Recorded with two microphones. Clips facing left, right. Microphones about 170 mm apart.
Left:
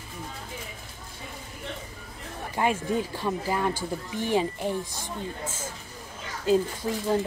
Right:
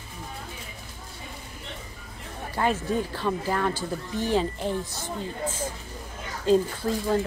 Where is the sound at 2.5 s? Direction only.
15° left (ahead or behind).